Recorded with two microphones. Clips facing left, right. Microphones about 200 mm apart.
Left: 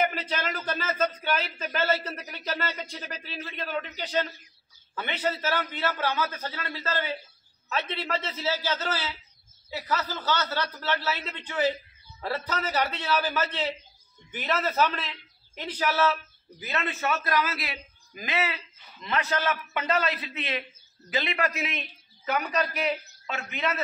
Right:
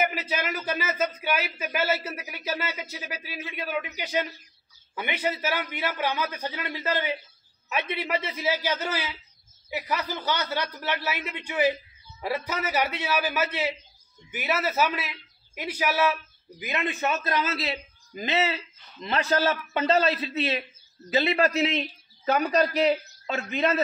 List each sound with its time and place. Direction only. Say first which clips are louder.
0.0 s a man's voice: even; 5° right (ahead or behind); by 23.8 s 35° right (ahead or behind)